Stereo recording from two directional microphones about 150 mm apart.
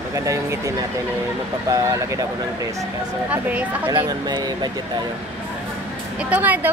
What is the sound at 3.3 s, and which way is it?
Speech, 10° right (ahead or behind).